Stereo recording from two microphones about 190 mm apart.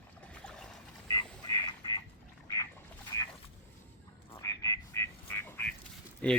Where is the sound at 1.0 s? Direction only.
20° left (ahead or behind).